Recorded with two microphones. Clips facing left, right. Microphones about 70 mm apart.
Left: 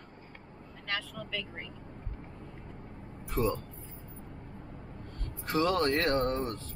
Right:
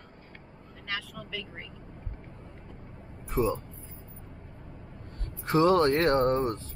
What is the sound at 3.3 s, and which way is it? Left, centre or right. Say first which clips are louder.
Speech: right 3 dB; centre.